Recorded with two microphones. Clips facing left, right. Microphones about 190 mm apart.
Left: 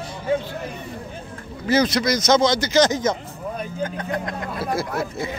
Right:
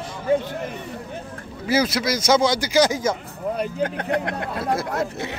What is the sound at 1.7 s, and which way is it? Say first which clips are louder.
A man's voice: left 2 dB; 5° right (ahead or behind).